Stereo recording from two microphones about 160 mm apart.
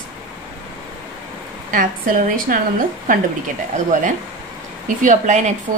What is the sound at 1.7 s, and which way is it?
Speech, 60° right (ahead or behind).